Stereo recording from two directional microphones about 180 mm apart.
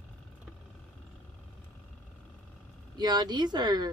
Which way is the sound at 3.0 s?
25° right (ahead or behind).